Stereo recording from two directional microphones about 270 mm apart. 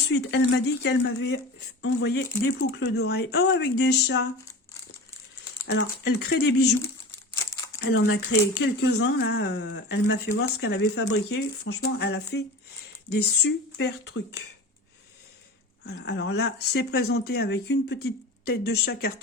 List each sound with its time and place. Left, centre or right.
0.1 s speech: left
5.6 s speech: left
7.8 s speech: left
15.8 s speech: left